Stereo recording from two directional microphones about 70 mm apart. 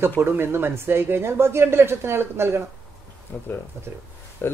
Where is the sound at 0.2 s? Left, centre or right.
Right.